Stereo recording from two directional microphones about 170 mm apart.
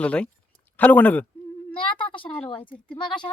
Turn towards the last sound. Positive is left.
turn(degrees=30)  # may be behind; listen again after turning